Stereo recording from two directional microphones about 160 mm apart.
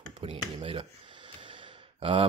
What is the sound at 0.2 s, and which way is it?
Speech, 35° right (ahead or behind).